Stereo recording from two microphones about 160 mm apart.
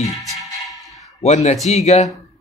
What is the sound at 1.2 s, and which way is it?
Speech, 45° left (ahead or behind).